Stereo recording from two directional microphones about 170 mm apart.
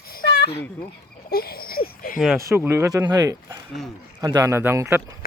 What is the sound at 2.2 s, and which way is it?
Speech, centre (ahead or behind).